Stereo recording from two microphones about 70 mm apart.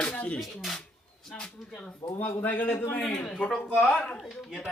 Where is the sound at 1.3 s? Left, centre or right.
Centre.